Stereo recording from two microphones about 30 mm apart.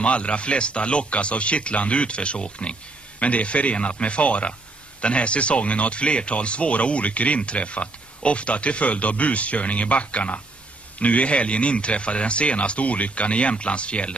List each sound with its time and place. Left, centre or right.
0.0 s speech: left
3.2 s speech: left